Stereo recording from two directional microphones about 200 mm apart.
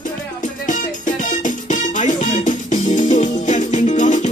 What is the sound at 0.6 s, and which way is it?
Music, 40° left (ahead or behind).